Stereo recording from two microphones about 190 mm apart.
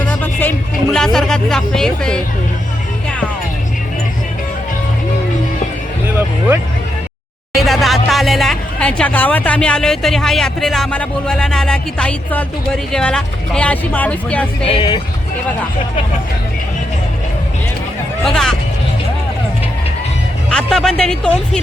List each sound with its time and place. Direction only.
0.0 s music: 10° left (ahead or behind)
7.5 s speech: centre (ahead or behind)
14.7 s speech: 30° left (ahead or behind)
18.3 s speech: centre (ahead or behind)
20.5 s speech: 5° left (ahead or behind)